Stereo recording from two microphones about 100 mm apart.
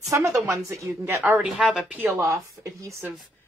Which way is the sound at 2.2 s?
30° right (ahead or behind).